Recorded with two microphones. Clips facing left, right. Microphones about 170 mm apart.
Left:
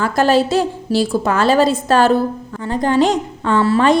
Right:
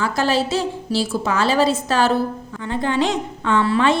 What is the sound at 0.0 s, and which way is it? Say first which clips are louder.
A woman's voice: left 5 dB; 50° left (ahead or behind).